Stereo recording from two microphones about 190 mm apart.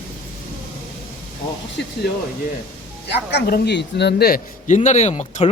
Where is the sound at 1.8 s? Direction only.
65° left (ahead or behind).